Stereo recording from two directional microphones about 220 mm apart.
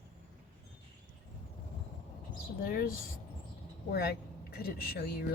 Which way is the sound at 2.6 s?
40° left (ahead or behind).